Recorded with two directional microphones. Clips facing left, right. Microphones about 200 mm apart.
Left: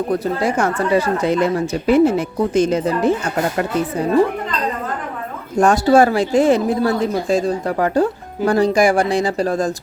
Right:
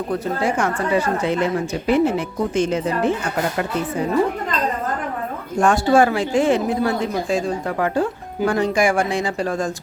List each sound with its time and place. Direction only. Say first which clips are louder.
0.1 s speech: even; 40° left (ahead or behind)
5.5 s speech: left 3 dB; 40° left (ahead or behind)